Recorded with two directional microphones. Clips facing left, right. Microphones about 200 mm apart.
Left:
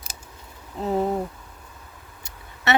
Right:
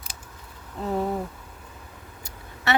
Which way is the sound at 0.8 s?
20° left (ahead or behind).